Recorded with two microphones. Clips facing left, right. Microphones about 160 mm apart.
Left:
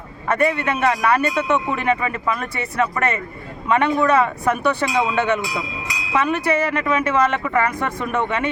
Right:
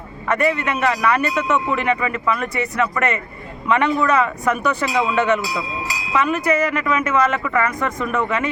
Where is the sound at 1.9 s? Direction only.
40° left (ahead or behind).